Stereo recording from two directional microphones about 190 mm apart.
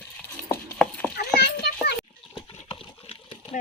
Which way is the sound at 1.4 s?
60° left (ahead or behind).